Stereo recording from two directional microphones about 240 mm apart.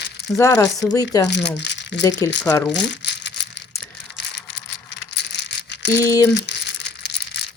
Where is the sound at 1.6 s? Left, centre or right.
Left.